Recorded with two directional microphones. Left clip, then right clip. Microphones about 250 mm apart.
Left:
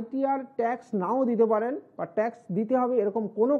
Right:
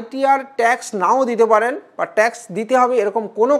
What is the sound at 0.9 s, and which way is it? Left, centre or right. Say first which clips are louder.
Speech: right 11 dB; centre.